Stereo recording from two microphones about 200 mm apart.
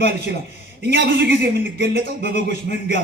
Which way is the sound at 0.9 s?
55° right (ahead or behind).